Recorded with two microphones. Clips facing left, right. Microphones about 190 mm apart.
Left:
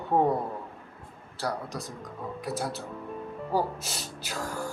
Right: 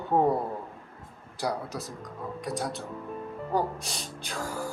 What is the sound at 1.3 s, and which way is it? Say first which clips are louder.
Speech: right 1 dB; 10° right (ahead or behind).